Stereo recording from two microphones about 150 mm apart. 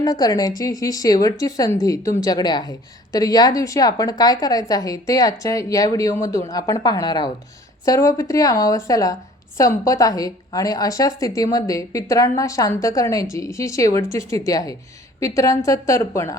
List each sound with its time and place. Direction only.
0.0 s a woman's voice: 25° left (ahead or behind)